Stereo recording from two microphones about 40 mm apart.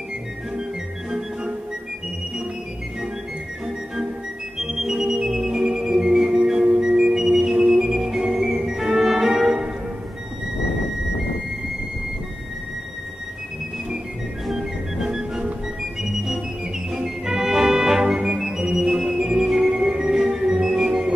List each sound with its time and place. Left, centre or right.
3.6 s music: centre
14.5 s music: centre
15.0 s music: centre
16.0 s organ: centre
16.9 s music: centre